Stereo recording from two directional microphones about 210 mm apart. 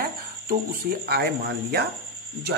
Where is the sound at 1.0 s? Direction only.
50° right (ahead or behind).